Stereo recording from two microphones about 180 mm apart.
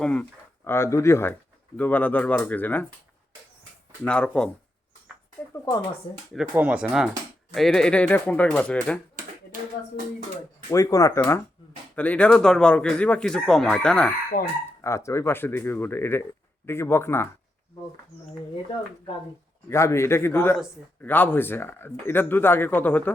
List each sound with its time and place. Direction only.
0.0 s speech: 5° left (ahead or behind)
4.0 s speech: 5° left (ahead or behind)
5.7 s speech: 20° left (ahead or behind)
6.5 s speech: 10° right (ahead or behind); by 9.0 s 5° left (ahead or behind)
10.7 s speech: 20° left (ahead or behind)
14.8 s speech: 15° left (ahead or behind)
19.7 s speech: 15° left (ahead or behind)